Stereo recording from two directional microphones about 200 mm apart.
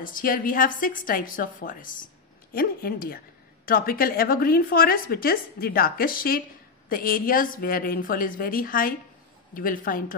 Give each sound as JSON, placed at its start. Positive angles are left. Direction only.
{"t": 0.0, "sound": "a woman's voice", "side_deg": 45}